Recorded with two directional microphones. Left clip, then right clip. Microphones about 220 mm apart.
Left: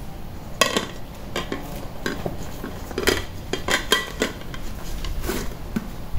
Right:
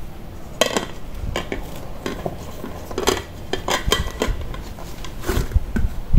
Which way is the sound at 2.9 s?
5° right (ahead or behind).